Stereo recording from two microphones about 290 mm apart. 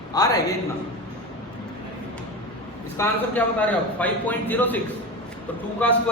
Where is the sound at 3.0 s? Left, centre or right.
Centre.